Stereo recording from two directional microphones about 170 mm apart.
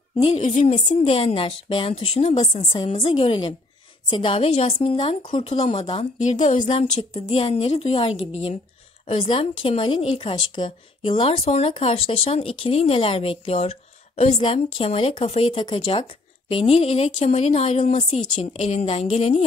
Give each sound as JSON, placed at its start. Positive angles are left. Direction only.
{"t": 0.2, "sound": "speech", "side_deg": 40}